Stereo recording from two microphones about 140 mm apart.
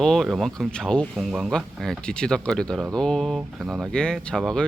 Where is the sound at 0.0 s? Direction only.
5° left (ahead or behind).